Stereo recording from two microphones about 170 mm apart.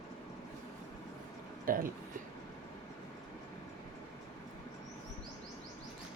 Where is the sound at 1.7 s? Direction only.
55° right (ahead or behind).